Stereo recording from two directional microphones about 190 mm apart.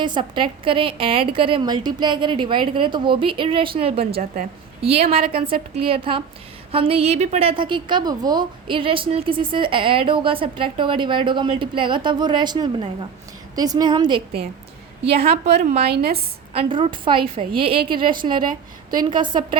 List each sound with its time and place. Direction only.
0.0 s a woman's voice: 25° right (ahead or behind)
15.9 s a woman's voice: 55° right (ahead or behind)
16.6 s a woman's voice: 30° right (ahead or behind)